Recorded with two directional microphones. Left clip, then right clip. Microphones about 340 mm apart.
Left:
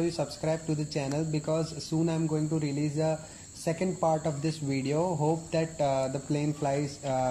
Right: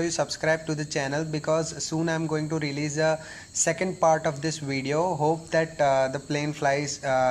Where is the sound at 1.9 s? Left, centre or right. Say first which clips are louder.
Right 1 dB; right.